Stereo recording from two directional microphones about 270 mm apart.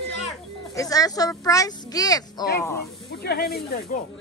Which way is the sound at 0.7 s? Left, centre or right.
Centre.